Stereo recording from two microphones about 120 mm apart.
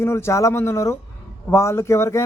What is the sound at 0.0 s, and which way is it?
A man's voice, 20° left (ahead or behind).